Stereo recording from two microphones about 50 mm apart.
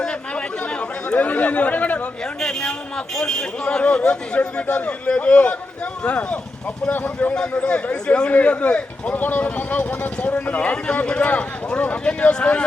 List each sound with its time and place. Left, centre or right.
0.0 s chatter: centre
2.4 s a man's voice: centre
9.2 s speech: left; by 12.6 s centre